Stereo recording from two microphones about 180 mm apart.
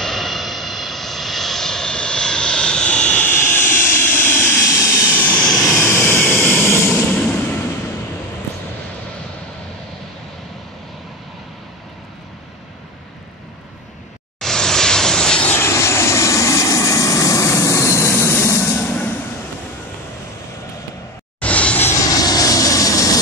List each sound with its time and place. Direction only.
0.0 s vehicle: centre (ahead or behind)
14.4 s vehicle: 5° left (ahead or behind)
21.4 s vehicle: 5° left (ahead or behind)